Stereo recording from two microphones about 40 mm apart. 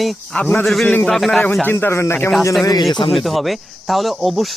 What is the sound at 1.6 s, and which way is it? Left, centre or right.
Speech, left.